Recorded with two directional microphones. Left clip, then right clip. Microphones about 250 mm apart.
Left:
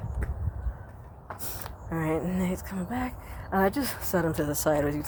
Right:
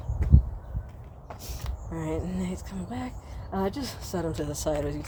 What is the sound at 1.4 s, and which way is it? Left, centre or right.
Speech, left.